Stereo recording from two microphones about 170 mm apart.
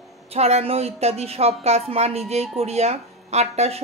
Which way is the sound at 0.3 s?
35° right (ahead or behind).